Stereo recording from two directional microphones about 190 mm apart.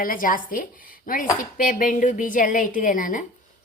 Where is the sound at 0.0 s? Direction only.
45° left (ahead or behind).